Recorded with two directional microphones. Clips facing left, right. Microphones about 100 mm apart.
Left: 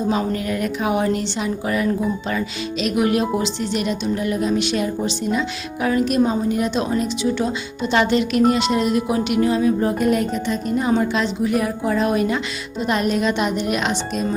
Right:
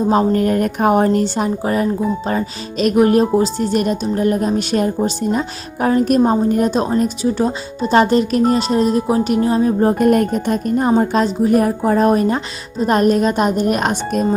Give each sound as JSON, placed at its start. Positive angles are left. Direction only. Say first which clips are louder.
{"t": 0.1, "sound": "a woman's voice", "louder": "right 7 dB", "side_deg": -45}